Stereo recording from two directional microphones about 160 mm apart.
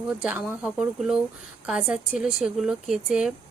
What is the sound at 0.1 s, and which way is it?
Speech, 10° right (ahead or behind).